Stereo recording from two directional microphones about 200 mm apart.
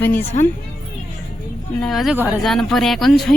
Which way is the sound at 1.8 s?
Centre (ahead or behind).